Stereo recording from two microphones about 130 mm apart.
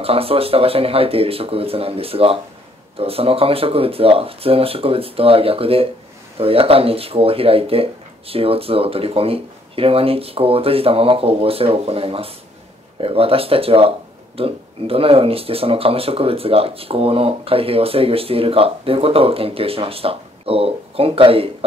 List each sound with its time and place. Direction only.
0.0 s speech: 45° right (ahead or behind)